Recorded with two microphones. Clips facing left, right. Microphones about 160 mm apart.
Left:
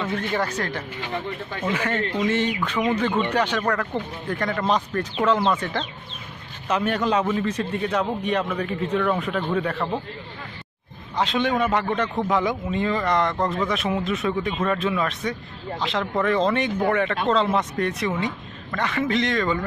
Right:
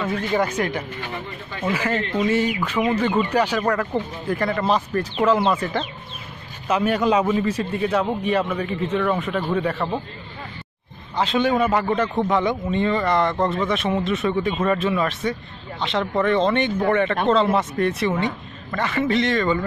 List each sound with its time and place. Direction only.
0.3 s speech: 20° right (ahead or behind)
1.7 s a man's voice: 5° right (ahead or behind)
11.1 s a man's voice: centre (ahead or behind)